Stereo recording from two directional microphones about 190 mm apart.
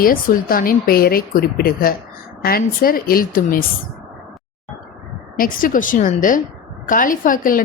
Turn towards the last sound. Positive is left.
turn(degrees=45)  # may be behind; listen again after turning